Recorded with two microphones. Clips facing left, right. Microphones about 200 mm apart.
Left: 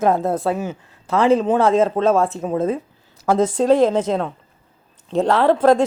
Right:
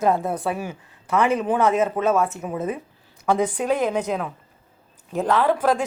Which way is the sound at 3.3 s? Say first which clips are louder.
Left 7 dB; 90° left.